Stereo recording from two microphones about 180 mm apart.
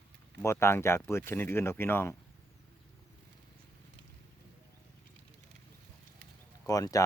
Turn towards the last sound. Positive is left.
turn(degrees=20)  # may be behind; listen again after turning